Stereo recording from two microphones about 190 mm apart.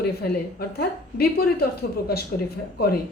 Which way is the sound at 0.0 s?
55° left (ahead or behind).